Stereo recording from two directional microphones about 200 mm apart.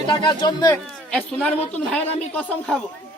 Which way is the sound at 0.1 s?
20° left (ahead or behind).